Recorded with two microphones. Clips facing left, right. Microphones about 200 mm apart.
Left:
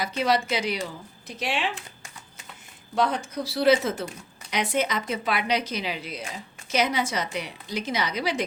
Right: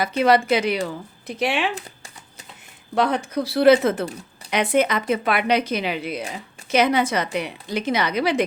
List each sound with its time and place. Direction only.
0.0 s a woman's voice: 55° right (ahead or behind)
2.9 s a woman's voice: 60° right (ahead or behind)